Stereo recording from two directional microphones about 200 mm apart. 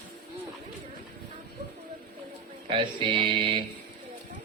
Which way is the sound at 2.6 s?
25° right (ahead or behind).